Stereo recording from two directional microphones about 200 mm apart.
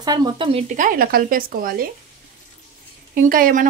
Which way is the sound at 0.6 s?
40° right (ahead or behind).